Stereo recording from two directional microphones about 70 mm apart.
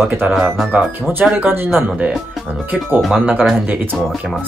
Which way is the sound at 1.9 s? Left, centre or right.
Centre.